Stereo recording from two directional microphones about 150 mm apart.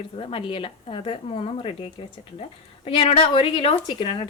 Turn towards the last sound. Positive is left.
turn(degrees=35)  # may be behind; listen again after turning